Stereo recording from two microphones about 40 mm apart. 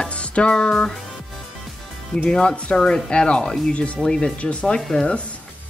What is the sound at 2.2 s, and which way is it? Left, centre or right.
Speech, left.